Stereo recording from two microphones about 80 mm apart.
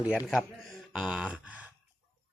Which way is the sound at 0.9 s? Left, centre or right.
Centre.